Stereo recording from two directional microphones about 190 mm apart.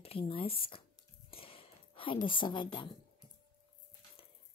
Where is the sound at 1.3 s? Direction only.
30° left (ahead or behind).